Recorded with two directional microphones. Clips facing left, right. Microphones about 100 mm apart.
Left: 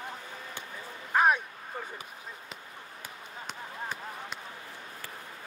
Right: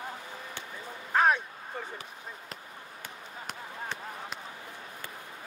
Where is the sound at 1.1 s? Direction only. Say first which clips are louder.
Even; 15° left (ahead or behind).